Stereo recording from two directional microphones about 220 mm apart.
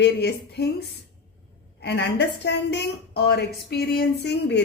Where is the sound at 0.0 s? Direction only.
50° left (ahead or behind).